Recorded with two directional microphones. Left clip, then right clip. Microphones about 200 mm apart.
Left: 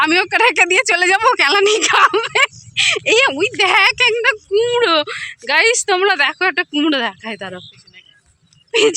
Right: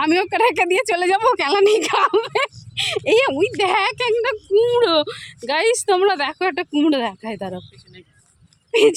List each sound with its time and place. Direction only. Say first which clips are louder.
0.0 s speech: left 4 dB; 5° right (ahead or behind)
8.7 s speech: left 1 dB; centre (ahead or behind)